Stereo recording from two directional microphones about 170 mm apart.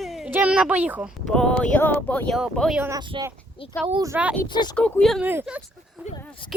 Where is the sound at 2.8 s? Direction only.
20° right (ahead or behind).